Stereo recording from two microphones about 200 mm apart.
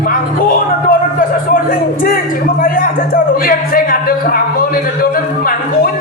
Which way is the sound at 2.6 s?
45° left (ahead or behind).